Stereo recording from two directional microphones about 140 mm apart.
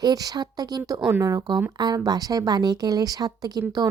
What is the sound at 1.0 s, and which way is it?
Speech, 10° right (ahead or behind).